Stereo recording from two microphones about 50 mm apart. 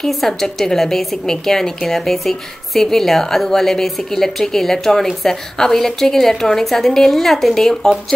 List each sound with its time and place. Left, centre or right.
0.0 s a woman's voice: centre